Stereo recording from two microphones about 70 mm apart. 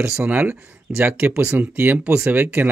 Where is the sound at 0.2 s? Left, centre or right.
Right.